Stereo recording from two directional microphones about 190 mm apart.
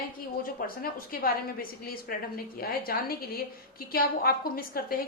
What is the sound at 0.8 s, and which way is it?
A woman's voice, 50° left (ahead or behind).